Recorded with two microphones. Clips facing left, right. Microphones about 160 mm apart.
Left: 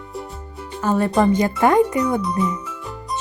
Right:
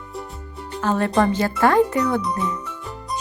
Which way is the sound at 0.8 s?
10° left (ahead or behind).